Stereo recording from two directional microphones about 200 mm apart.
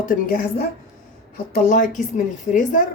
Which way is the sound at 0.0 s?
45° left (ahead or behind).